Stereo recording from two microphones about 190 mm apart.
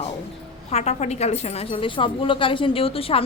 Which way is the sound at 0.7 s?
35° left (ahead or behind).